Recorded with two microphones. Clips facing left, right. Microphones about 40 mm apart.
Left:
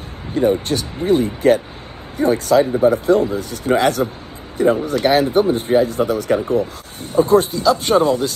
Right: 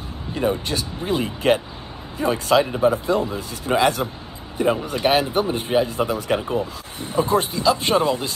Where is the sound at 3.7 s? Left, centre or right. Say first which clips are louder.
Left 3 dB; left.